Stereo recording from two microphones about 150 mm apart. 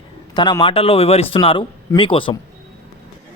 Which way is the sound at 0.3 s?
30° left (ahead or behind).